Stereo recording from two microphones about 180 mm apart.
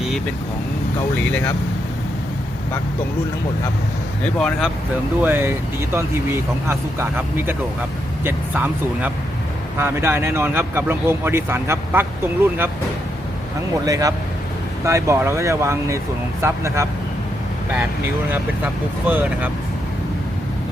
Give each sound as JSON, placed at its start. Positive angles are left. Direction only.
{"t": 1.2, "sound": "speech", "side_deg": 10}
{"t": 4.4, "sound": "speech", "side_deg": 0}
{"t": 5.2, "sound": "speech", "side_deg": -10}
{"t": 13.8, "sound": "speech", "side_deg": -20}
{"t": 18.3, "sound": "speech", "side_deg": -10}